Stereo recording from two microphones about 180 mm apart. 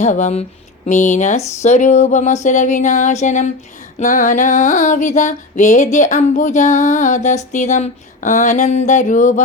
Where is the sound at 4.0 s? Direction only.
45° left (ahead or behind).